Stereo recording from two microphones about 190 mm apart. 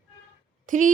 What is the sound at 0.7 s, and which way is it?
Speech, 40° right (ahead or behind).